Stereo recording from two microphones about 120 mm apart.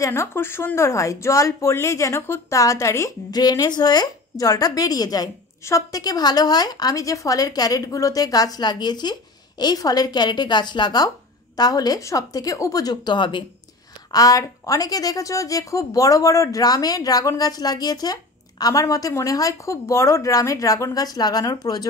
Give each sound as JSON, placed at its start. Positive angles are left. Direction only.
{"t": 0.0, "sound": "speech", "side_deg": 20}
{"t": 14.1, "sound": "a woman's voice", "side_deg": 30}